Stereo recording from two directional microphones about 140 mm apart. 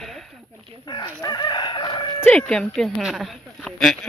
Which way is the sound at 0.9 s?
30° left (ahead or behind).